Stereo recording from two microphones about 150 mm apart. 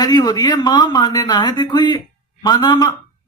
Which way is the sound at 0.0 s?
30° left (ahead or behind).